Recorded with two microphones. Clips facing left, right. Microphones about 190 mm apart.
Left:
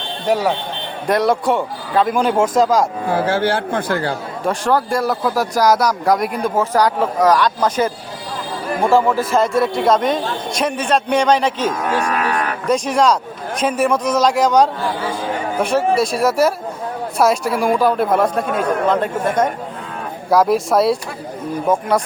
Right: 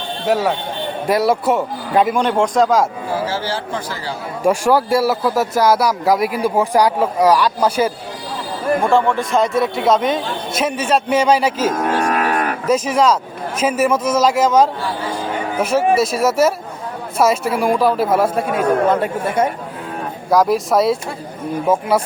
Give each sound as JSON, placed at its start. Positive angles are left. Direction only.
{"t": 0.3, "sound": "speech", "side_deg": 0}
{"t": 3.1, "sound": "a man's voice", "side_deg": 60}
{"t": 4.4, "sound": "speech", "side_deg": -10}
{"t": 8.8, "sound": "speech", "side_deg": 0}
{"t": 11.7, "sound": "cattle", "side_deg": -45}
{"t": 12.6, "sound": "speech", "side_deg": -5}